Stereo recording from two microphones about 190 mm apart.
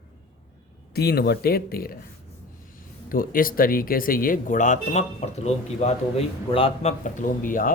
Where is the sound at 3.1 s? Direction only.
50° left (ahead or behind).